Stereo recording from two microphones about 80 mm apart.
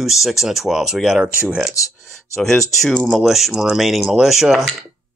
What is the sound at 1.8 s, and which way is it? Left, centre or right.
Speech, left.